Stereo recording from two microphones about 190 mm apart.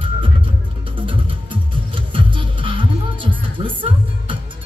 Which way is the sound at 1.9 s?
25° right (ahead or behind).